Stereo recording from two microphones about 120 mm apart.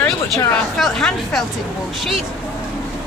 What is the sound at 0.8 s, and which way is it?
Speech, 5° left (ahead or behind).